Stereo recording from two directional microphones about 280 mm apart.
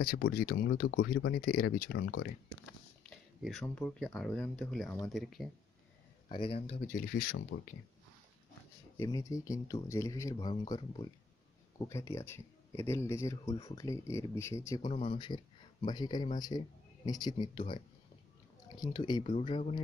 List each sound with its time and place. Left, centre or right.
0.2 s speech: left
3.1 s speech: centre
6.2 s speech: centre
7.0 s speech: left
8.9 s speech: centre